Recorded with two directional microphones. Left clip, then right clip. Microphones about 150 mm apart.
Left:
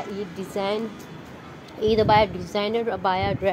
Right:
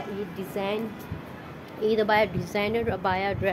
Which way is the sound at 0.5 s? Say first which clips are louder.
Left 4 dB; 30° left (ahead or behind).